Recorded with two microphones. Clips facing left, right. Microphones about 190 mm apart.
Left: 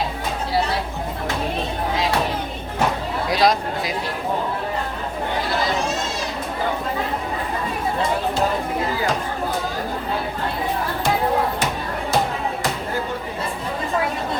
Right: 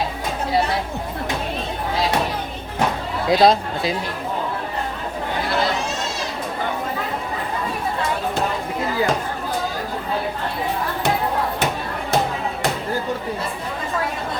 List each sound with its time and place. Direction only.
3.2 s speech: 25° right (ahead or behind)